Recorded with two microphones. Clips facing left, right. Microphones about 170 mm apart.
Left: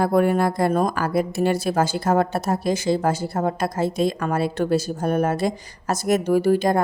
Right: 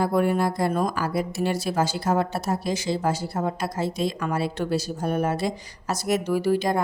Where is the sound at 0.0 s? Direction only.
55° left (ahead or behind).